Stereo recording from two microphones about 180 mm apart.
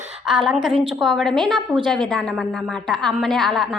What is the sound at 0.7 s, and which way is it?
Speech, 30° right (ahead or behind).